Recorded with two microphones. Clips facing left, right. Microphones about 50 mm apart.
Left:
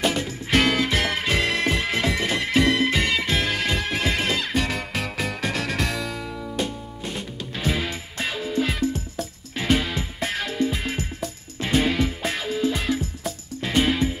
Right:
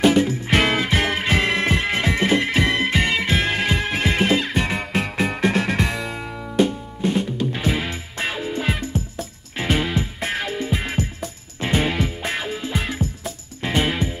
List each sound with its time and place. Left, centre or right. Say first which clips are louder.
0.0 s music: right 8 dB; centre
6.5 s music: right 11 dB; centre